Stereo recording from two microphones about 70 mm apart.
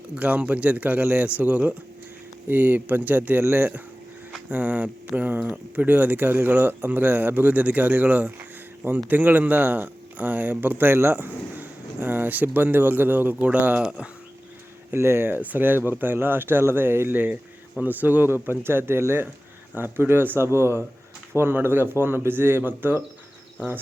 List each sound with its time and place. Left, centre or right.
0.1 s speech: centre
13.8 s speech: centre
14.9 s speech: right